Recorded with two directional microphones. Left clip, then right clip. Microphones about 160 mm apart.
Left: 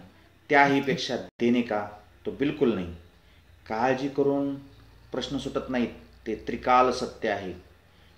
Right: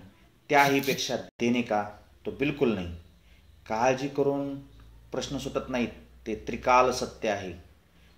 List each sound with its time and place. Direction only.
0.5 s speech: 30° right (ahead or behind)